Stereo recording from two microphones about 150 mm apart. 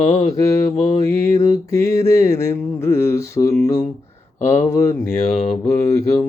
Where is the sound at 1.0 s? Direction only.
20° left (ahead or behind).